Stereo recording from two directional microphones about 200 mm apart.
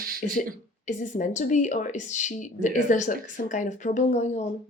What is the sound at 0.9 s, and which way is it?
Speech, 40° left (ahead or behind).